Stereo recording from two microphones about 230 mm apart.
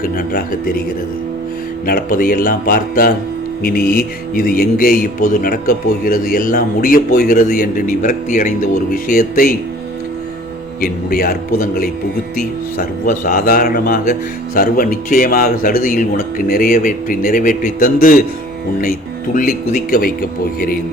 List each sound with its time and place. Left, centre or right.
0.0 s a man's voice: left
1.9 s a man's voice: left
10.8 s a man's voice: left